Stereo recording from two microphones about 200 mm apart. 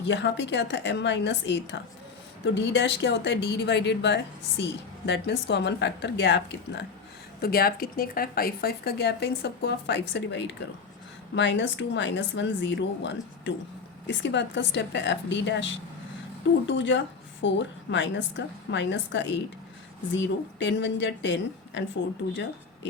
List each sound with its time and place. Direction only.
0.1 s speech: 60° left (ahead or behind)
7.4 s speech: 50° left (ahead or behind)